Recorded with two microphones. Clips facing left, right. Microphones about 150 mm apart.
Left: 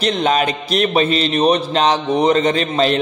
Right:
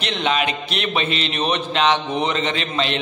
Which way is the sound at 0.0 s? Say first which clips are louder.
Left 5 dB; 40° left (ahead or behind).